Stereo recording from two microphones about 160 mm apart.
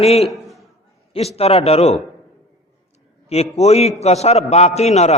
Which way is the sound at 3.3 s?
40° left (ahead or behind).